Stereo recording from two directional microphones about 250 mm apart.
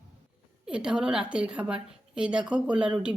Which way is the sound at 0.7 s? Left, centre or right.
Centre.